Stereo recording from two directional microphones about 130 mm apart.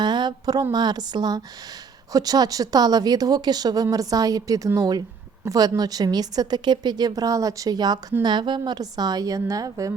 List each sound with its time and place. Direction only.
0.0 s a woman's voice: 35° right (ahead or behind)